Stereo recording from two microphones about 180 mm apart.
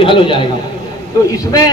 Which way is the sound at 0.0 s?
30° left (ahead or behind).